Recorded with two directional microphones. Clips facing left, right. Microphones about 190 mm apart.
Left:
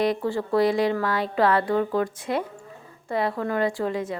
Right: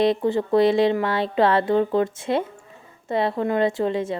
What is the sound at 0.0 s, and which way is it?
A woman's voice, 25° right (ahead or behind).